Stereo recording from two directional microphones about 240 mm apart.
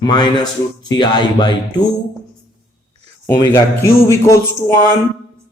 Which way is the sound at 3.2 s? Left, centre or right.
Centre.